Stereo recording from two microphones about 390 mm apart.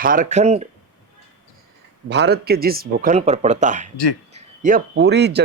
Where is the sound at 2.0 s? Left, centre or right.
Right.